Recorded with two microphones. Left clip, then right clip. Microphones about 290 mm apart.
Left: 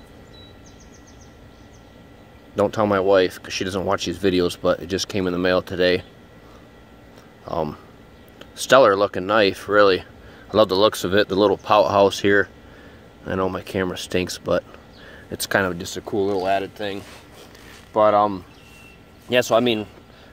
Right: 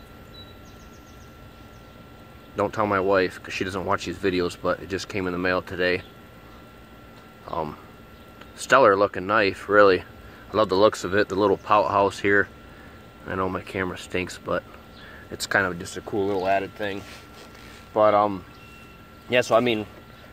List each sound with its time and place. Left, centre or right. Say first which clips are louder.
2.5 s speech: left 4 dB; left
7.4 s speech: left 4 dB; left